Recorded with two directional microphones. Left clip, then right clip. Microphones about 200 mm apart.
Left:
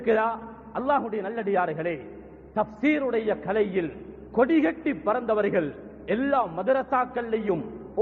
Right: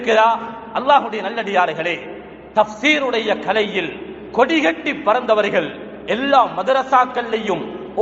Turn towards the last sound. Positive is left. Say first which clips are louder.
# right 7 dB
turn(degrees=40)  # may be behind; listen again after turning